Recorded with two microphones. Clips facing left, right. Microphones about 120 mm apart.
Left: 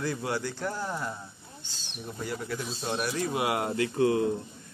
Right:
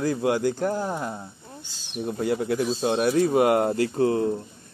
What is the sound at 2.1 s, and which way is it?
Speech, 55° right (ahead or behind).